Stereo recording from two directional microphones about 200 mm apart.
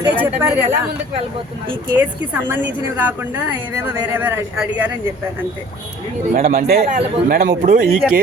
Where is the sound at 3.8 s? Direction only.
10° right (ahead or behind).